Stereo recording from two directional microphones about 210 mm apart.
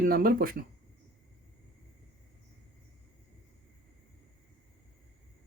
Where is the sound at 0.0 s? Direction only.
45° right (ahead or behind).